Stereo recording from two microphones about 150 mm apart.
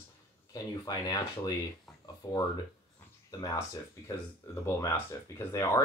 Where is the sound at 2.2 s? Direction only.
25° left (ahead or behind).